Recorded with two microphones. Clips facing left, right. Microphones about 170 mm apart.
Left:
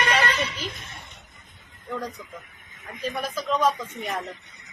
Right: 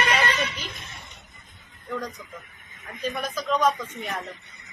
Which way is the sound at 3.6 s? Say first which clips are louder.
Even; 30° left (ahead or behind).